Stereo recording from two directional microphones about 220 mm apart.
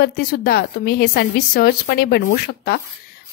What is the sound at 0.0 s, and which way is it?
Speech, 45° left (ahead or behind).